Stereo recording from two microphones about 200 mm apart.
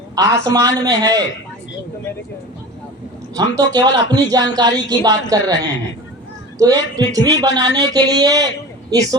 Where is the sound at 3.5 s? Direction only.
20° right (ahead or behind).